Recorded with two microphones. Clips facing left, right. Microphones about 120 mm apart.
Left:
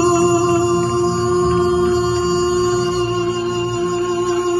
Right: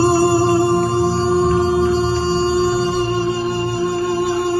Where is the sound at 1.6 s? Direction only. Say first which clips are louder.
Left 1 dB; 25° left (ahead or behind).